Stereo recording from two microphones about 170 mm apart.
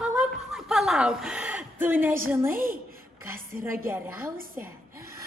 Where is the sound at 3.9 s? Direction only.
10° right (ahead or behind).